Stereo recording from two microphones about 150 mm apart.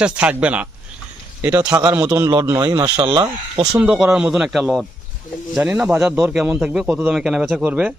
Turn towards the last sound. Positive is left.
turn(degrees=-10)  # may be behind; listen again after turning